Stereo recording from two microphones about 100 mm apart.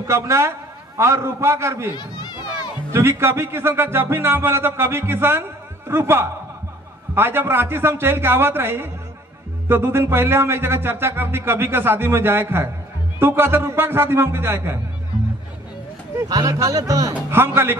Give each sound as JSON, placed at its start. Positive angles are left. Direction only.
{"t": 0.0, "sound": "speech", "side_deg": -30}
{"t": 2.0, "sound": "a sound", "side_deg": 45}
{"t": 2.9, "sound": "speech", "side_deg": -25}
{"t": 16.2, "sound": "speech", "side_deg": -35}
{"t": 17.3, "sound": "speech", "side_deg": -25}